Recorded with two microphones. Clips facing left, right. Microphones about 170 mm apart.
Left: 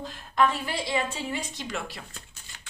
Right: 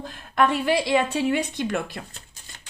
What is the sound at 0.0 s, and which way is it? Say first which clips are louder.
A woman's voice: right 2 dB; 55° right (ahead or behind).